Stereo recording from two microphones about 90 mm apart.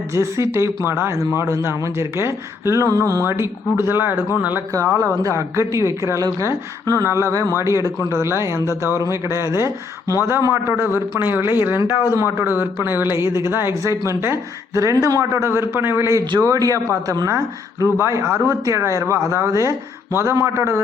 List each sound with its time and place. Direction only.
0.1 s a man's voice: 35° right (ahead or behind)
4.7 s a man's voice: 35° right (ahead or behind)